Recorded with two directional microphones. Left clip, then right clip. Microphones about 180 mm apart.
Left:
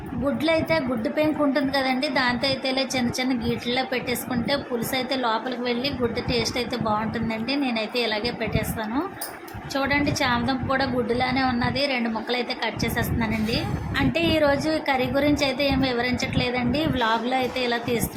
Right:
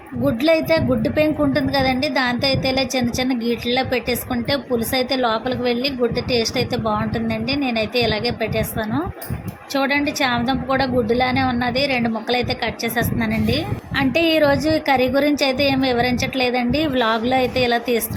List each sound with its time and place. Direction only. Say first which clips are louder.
0.3 s a woman's voice: right 6 dB; 20° right (ahead or behind)